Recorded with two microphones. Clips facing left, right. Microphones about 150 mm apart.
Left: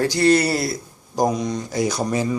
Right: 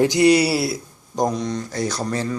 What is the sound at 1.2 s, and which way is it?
Speech, 10° left (ahead or behind).